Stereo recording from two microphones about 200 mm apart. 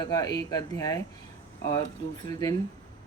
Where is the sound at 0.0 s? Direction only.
20° left (ahead or behind).